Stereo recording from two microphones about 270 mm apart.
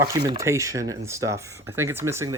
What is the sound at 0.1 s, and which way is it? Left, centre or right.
Speech, centre.